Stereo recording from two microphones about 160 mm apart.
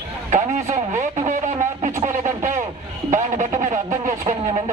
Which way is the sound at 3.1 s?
50° right (ahead or behind).